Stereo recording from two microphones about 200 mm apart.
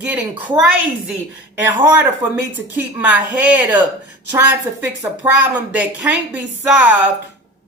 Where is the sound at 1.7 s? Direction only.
10° right (ahead or behind).